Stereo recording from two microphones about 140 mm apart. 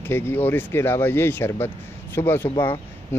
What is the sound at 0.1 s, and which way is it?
Speech, 15° left (ahead or behind).